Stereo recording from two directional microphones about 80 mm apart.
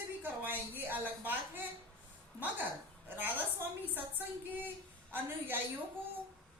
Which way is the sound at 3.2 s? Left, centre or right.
Right.